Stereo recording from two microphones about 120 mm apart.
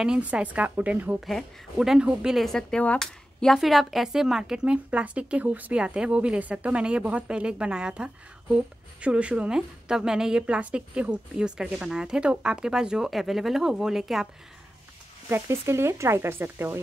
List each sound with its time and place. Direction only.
0.0 s speech: 10° right (ahead or behind)
1.2 s speech: centre (ahead or behind)
15.2 s speech: 20° right (ahead or behind)